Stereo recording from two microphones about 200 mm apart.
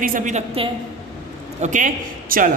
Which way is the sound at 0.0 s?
40° right (ahead or behind).